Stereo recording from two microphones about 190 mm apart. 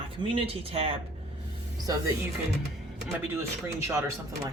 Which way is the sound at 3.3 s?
15° right (ahead or behind).